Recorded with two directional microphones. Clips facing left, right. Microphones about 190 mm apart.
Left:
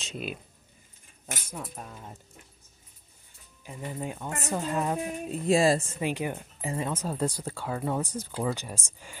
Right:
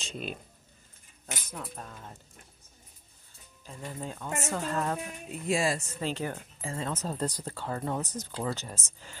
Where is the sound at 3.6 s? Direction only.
15° left (ahead or behind).